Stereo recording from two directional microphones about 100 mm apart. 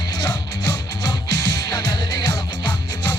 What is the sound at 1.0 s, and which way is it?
Music, 45° left (ahead or behind).